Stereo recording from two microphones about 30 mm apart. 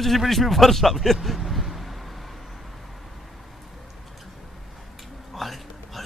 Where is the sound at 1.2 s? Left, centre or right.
Centre.